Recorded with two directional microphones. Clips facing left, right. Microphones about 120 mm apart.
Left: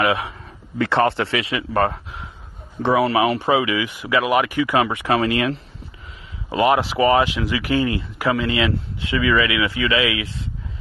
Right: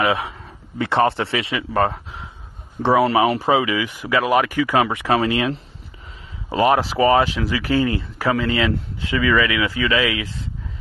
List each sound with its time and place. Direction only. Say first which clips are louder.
0.0 s speech: even; 25° right (ahead or behind)
2.8 s speech: right 1 dB; 35° right (ahead or behind)